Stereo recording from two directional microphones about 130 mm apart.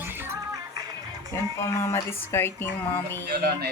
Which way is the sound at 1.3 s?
20° left (ahead or behind).